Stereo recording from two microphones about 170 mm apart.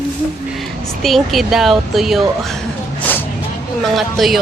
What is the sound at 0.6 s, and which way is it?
Speech, centre (ahead or behind).